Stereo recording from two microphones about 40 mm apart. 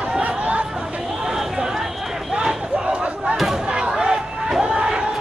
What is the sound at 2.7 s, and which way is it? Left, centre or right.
Chatter, right.